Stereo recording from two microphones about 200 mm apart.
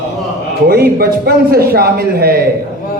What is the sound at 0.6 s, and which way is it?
Speech, 50° right (ahead or behind).